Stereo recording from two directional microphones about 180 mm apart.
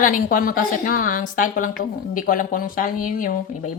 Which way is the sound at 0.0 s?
50° left (ahead or behind).